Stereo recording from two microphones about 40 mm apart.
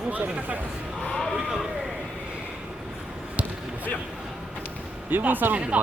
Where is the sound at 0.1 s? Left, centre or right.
Right.